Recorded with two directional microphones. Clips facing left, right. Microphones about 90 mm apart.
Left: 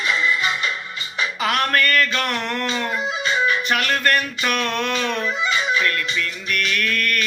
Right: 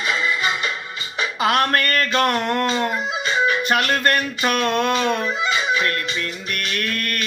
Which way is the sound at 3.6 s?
30° right (ahead or behind).